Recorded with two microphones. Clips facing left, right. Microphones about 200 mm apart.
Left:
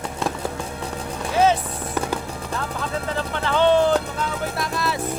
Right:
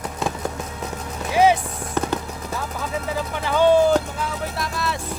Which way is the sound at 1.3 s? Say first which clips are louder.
Right 2 dB; 10° right (ahead or behind).